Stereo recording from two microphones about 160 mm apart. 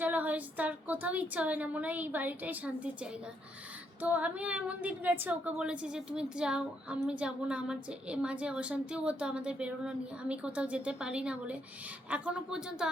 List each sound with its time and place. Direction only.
0.0 s speech: 10° right (ahead or behind)